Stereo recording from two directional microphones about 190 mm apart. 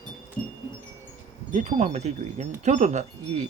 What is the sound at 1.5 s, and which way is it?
Wind chime, 35° right (ahead or behind).